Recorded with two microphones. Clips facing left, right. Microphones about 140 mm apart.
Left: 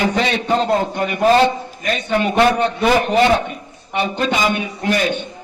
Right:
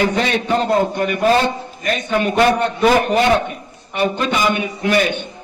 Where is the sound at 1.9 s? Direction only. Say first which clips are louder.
Even; 50° right (ahead or behind).